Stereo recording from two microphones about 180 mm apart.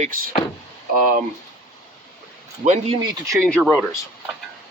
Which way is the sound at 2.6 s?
45° right (ahead or behind).